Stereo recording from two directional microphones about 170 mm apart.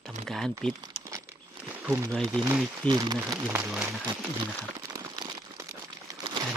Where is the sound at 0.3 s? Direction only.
Centre (ahead or behind).